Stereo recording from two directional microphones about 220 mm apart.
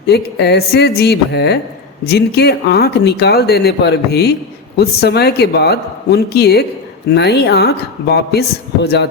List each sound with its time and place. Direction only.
0.0 s speech: 50° left (ahead or behind)